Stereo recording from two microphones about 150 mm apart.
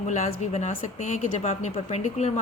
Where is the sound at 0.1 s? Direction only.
50° left (ahead or behind).